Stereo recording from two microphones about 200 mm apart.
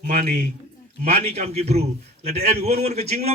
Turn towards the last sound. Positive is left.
turn(degrees=-30)  # may be behind; listen again after turning